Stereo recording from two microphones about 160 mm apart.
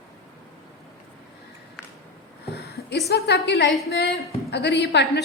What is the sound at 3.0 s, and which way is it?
A woman's voice, 90° left.